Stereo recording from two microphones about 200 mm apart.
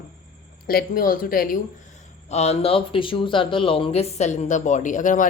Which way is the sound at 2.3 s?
30° left (ahead or behind).